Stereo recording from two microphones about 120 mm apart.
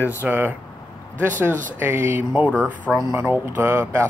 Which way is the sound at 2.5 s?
10° left (ahead or behind).